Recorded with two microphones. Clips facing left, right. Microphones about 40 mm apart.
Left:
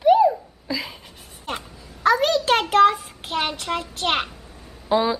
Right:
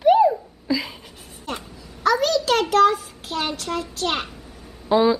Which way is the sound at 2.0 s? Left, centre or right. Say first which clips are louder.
Left 1 dB; left.